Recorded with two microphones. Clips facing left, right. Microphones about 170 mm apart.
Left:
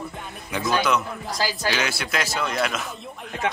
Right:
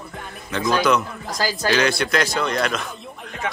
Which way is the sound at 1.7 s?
5° left (ahead or behind).